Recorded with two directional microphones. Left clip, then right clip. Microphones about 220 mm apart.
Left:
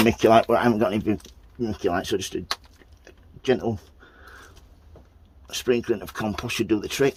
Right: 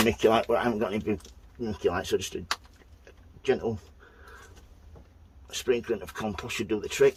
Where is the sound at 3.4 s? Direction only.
40° left (ahead or behind).